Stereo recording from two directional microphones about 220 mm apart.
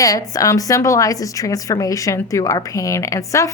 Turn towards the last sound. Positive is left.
turn(degrees=15)  # may be behind; listen again after turning